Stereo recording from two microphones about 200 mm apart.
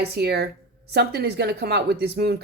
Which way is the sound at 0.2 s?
55° right (ahead or behind).